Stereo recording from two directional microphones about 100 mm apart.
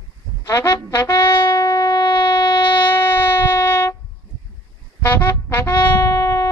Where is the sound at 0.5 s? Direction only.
30° left (ahead or behind).